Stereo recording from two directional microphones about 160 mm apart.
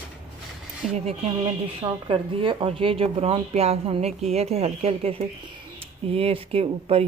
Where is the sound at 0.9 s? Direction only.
45° right (ahead or behind).